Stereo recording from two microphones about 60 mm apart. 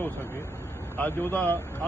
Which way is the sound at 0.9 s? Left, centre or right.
Left.